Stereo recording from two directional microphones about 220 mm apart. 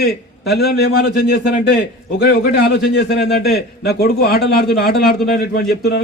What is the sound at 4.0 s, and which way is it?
A man's voice, 45° left (ahead or behind).